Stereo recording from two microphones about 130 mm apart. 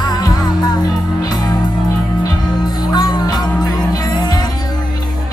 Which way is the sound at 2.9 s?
30° left (ahead or behind).